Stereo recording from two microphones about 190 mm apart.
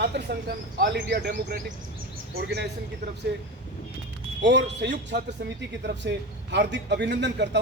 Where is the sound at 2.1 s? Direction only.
55° right (ahead or behind).